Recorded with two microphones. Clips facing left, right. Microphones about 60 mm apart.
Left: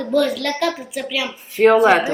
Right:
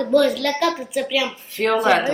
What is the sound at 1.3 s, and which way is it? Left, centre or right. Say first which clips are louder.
Speech: left 8 dB; centre.